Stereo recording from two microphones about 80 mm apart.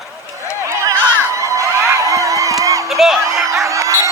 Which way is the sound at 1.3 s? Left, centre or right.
Right.